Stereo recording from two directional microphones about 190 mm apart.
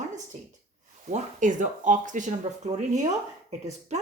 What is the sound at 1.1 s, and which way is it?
A woman's voice, 40° right (ahead or behind).